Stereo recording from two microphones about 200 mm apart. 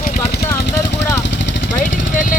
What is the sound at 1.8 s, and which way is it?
Speech, 40° left (ahead or behind).